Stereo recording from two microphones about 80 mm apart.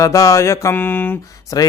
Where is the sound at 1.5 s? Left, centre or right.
Left.